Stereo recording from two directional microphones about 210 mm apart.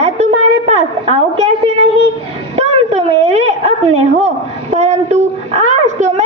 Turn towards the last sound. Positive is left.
turn(degrees=-35)  # may be behind; listen again after turning